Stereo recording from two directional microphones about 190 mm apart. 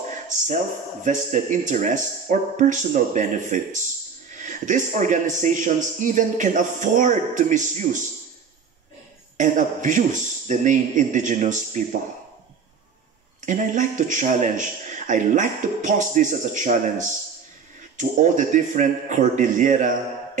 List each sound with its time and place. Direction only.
0.1 s a sound: 40° right (ahead or behind)
1.0 s a man's voice: 40° right (ahead or behind)
9.4 s a man's voice: 40° right (ahead or behind)
13.4 s a man's voice: 40° right (ahead or behind)